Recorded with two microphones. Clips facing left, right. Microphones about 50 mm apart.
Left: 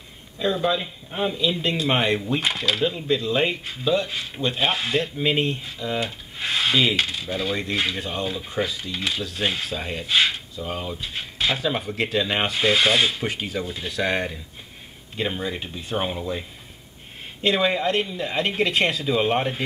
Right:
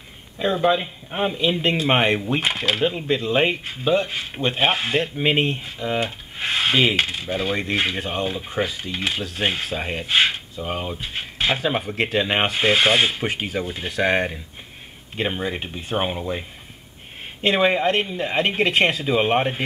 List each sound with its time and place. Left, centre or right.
0.4 s speech: right
17.4 s speech: right